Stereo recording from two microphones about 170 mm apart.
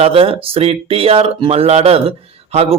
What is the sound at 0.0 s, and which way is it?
Speech, 35° right (ahead or behind).